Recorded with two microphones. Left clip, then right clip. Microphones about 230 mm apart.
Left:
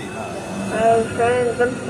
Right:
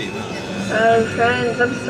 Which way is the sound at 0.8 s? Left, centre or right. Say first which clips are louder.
Right 1 dB; right.